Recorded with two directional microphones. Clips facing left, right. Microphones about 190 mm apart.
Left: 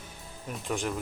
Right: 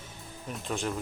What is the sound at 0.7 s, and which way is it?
Speech, 15° left (ahead or behind).